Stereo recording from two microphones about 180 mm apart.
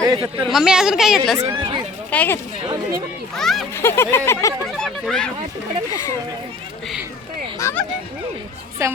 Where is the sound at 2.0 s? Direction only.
10° left (ahead or behind).